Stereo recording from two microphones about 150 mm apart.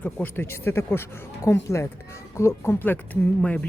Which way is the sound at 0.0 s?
10° left (ahead or behind).